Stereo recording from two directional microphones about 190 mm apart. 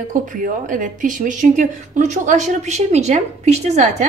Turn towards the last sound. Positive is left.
turn(degrees=-35)  # may be behind; listen again after turning